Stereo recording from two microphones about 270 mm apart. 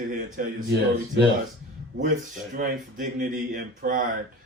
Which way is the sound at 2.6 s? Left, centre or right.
Right.